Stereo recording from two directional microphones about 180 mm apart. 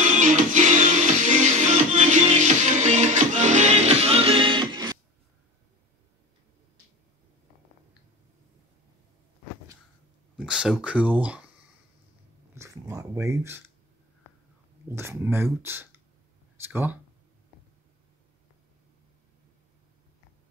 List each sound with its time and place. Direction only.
0.0 s music: 45° right (ahead or behind); by 4.9 s 25° right (ahead or behind)
10.3 s speech: 5° right (ahead or behind)
12.5 s speech: 15° right (ahead or behind)
14.9 s speech: 15° right (ahead or behind)